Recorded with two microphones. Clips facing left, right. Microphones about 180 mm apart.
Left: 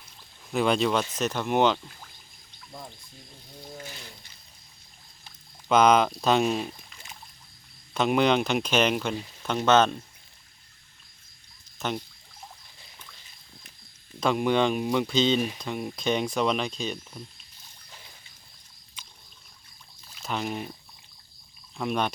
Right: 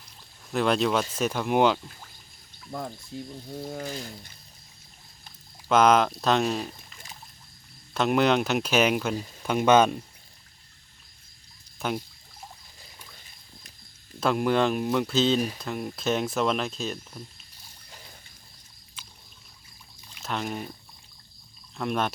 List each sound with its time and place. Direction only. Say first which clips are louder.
0.5 s speech: even; centre (ahead or behind)
3.8 s speech: right 9 dB; 40° right (ahead or behind)
5.6 s speech: even; centre (ahead or behind)
11.8 s a sound: right 1 dB; 5° right (ahead or behind)
14.2 s speech: even; centre (ahead or behind)
19.0 s rowboat: right 1 dB; 5° right (ahead or behind)
20.1 s pour: even; centre (ahead or behind)
21.8 s speech: even; centre (ahead or behind)